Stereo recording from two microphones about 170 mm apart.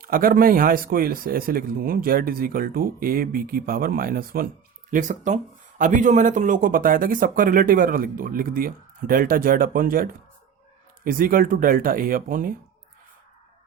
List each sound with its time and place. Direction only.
0.0 s speech: 55° right (ahead or behind)
4.9 s speech: 50° right (ahead or behind)